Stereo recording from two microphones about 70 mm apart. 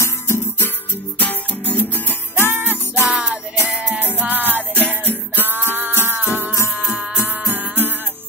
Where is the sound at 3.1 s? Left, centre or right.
Centre.